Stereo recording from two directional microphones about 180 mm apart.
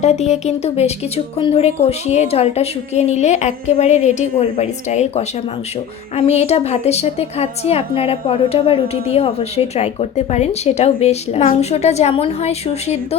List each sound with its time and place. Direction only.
0.0 s speech: 40° left (ahead or behind)